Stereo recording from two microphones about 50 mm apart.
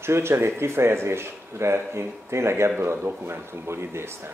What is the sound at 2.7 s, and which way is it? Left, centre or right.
Speech, right.